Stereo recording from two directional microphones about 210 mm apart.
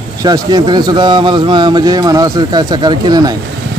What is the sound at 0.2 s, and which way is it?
A man's voice, 20° right (ahead or behind).